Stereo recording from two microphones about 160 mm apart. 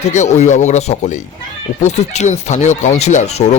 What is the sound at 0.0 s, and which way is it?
Speech, 45° left (ahead or behind).